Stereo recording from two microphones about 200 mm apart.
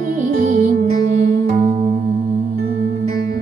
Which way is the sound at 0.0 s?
45° right (ahead or behind).